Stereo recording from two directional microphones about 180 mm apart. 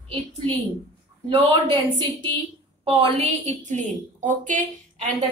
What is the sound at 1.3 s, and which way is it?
A woman's voice, 30° right (ahead or behind).